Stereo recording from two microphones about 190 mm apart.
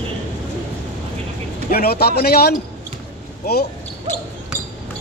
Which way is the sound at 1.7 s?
55° left (ahead or behind).